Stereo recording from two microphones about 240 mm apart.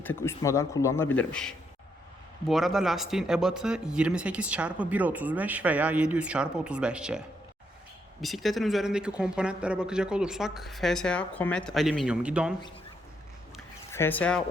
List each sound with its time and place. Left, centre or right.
0.0 s speech: centre
8.2 s speech: centre
13.9 s speech: centre